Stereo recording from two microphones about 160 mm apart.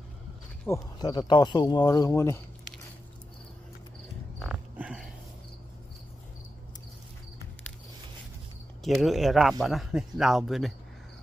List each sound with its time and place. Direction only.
0.7 s speech: 20° left (ahead or behind)
4.4 s a sound: 5° right (ahead or behind)
8.8 s speech: centre (ahead or behind)